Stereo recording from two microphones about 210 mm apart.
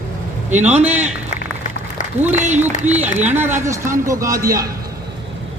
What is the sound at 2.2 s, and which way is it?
Speech, 35° right (ahead or behind).